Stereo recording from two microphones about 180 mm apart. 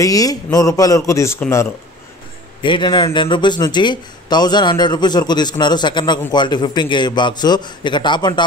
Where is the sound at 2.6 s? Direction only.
25° left (ahead or behind).